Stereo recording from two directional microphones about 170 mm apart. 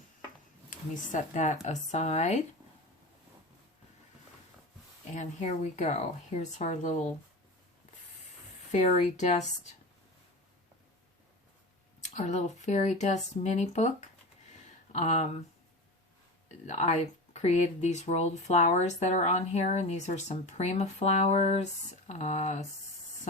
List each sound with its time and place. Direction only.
0.7 s speech: 50° left (ahead or behind)
5.1 s speech: 45° left (ahead or behind)
8.7 s speech: 40° left (ahead or behind)
12.0 s speech: 40° left (ahead or behind)
14.9 s speech: 40° left (ahead or behind)
16.6 s speech: 40° left (ahead or behind)